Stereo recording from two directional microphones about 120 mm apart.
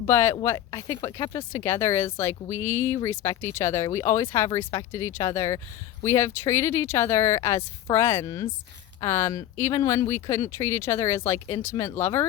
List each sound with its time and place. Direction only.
0.1 s speech: 20° left (ahead or behind)